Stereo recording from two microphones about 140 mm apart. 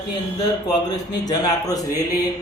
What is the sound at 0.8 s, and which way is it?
A man's voice, 30° left (ahead or behind).